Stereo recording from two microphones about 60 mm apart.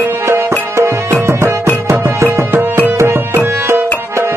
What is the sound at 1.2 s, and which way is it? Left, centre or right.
Music, right.